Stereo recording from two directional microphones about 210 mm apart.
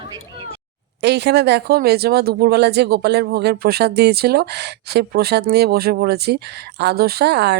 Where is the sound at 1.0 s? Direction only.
55° right (ahead or behind).